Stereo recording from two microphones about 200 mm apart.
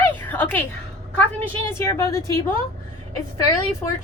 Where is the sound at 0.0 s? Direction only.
10° left (ahead or behind).